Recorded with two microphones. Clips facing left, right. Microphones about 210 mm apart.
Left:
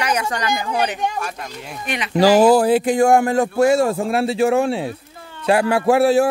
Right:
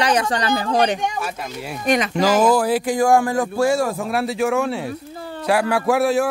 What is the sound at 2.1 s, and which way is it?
A man's voice, 35° left (ahead or behind).